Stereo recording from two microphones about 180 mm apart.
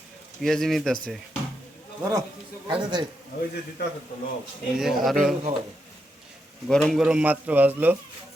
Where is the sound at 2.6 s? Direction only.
25° right (ahead or behind).